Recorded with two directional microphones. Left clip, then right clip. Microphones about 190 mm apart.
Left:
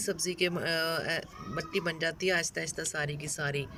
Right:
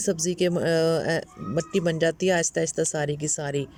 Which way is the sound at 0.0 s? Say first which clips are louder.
Right 6 dB; 35° right (ahead or behind).